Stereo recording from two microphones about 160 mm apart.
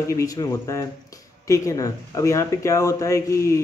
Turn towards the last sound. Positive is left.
turn(degrees=20)  # may be behind; listen again after turning